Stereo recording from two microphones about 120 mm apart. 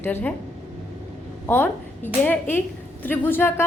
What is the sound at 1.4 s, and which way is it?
A woman's voice, 15° left (ahead or behind).